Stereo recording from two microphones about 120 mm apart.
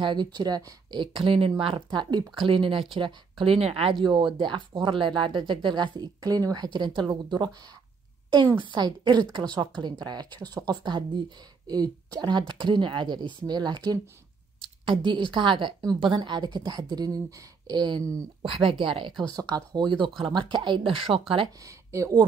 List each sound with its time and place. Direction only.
0.0 s speech: 40° right (ahead or behind)
4.0 s speech: 40° right (ahead or behind)
19.3 s speech: 35° right (ahead or behind)
21.6 s speech: 25° right (ahead or behind)